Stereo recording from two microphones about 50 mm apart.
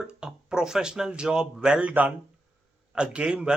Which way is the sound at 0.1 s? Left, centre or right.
Centre.